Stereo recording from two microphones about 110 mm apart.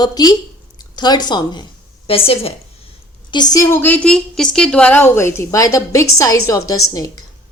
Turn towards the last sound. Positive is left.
turn(degrees=30)  # may be behind; listen again after turning